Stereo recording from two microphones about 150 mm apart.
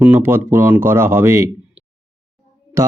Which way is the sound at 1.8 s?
10° right (ahead or behind).